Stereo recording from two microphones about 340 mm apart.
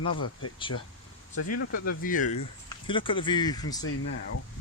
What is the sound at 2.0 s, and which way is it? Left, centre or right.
Speech, left.